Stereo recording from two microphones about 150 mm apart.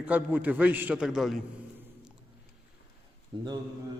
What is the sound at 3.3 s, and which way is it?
Speech, 30° right (ahead or behind).